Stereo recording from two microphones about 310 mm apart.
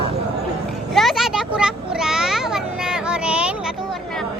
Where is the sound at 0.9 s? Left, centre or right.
Centre.